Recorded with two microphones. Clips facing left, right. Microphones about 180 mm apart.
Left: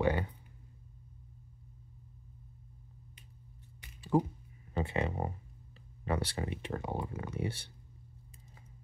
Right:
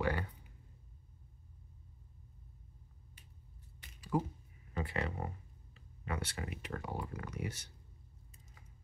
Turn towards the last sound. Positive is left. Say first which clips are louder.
# left 5 dB
turn(degrees=30)  # may be behind; listen again after turning